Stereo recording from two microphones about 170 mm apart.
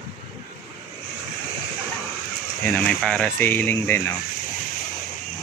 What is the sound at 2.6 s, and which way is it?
Speech, 5° left (ahead or behind).